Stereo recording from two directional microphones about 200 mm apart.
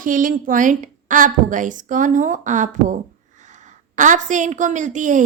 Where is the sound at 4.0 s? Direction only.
40° right (ahead or behind).